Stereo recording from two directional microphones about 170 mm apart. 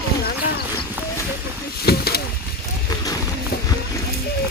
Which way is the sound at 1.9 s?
70° left (ahead or behind).